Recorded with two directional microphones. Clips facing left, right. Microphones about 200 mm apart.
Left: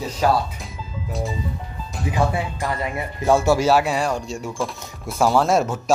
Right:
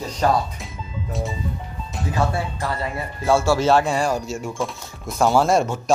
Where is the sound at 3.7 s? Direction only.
5° left (ahead or behind).